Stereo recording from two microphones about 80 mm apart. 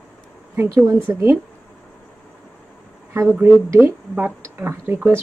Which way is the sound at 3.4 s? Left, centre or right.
Right.